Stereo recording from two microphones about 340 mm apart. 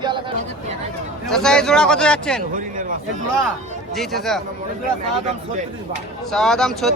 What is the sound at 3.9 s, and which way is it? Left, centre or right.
Speech, centre.